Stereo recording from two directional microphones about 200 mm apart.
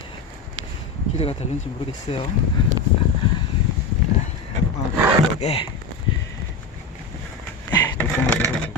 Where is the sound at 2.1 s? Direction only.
30° left (ahead or behind).